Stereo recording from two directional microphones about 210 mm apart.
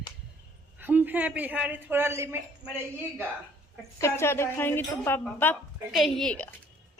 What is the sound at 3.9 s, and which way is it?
A woman's voice, 10° left (ahead or behind).